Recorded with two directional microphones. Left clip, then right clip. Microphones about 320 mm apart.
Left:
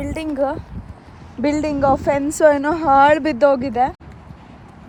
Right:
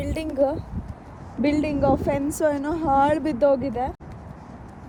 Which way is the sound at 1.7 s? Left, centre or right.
Left.